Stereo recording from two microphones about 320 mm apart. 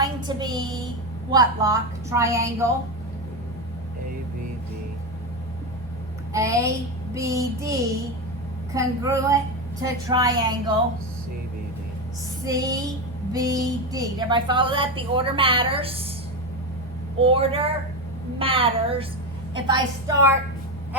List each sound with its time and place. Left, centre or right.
0.0 s a sound: centre
1.3 s a woman's voice: centre
6.3 s a woman's voice: centre
12.5 s a woman's voice: centre
17.2 s a woman's voice: centre